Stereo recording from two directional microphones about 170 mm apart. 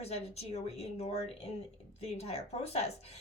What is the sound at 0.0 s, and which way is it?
Speech, 40° left (ahead or behind).